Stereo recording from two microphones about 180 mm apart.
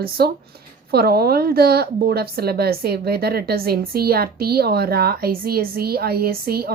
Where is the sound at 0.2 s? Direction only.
60° right (ahead or behind).